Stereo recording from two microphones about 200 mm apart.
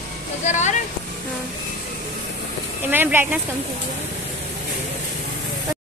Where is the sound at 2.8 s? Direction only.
10° right (ahead or behind).